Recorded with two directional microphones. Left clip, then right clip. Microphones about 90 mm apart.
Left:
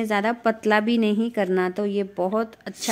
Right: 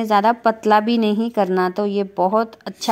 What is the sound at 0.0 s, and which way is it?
Speech, 20° right (ahead or behind).